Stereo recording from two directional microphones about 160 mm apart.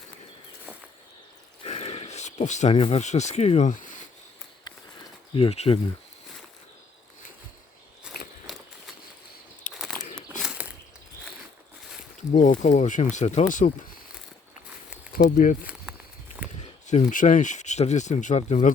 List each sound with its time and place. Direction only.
1.6 s speech: 40° left (ahead or behind)
5.3 s speech: 35° left (ahead or behind)
8.1 s walk: 5° right (ahead or behind)
9.7 s bird flight: centre (ahead or behind)
10.4 s a sound: 5° right (ahead or behind)
12.3 s speech: 50° left (ahead or behind)
15.4 s speech: 55° left (ahead or behind)
16.8 s speech: 50° left (ahead or behind)